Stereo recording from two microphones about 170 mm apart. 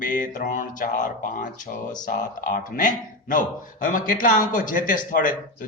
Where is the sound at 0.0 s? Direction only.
50° left (ahead or behind).